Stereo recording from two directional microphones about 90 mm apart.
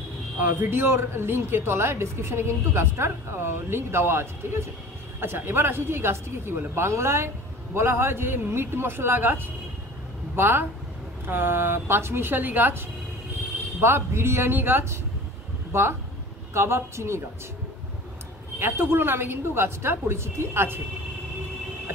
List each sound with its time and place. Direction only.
0.4 s speech: 25° right (ahead or behind)
16.5 s a woman's voice: 30° right (ahead or behind)
18.6 s speech: 25° right (ahead or behind)